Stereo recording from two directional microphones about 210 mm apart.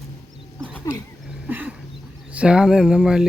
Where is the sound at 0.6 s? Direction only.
5° left (ahead or behind).